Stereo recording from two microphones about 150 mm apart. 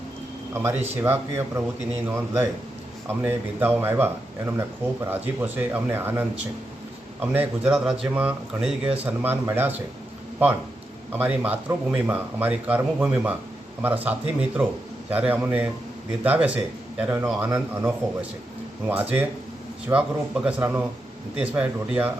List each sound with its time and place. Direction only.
0.6 s speech: 15° right (ahead or behind)
11.1 s speech: 10° right (ahead or behind)
18.9 s speech: 10° right (ahead or behind)